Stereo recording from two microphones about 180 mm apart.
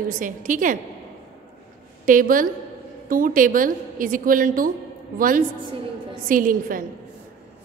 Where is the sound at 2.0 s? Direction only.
50° right (ahead or behind).